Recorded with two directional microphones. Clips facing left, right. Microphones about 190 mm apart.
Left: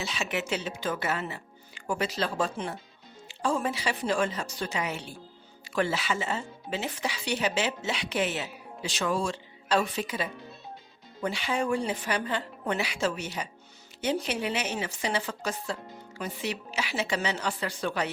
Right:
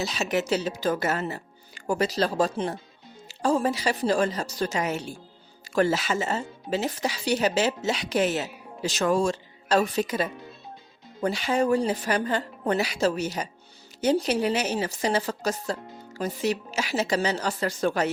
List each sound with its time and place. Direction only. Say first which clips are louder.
0.0 s speech: right 6 dB; 40° right (ahead or behind)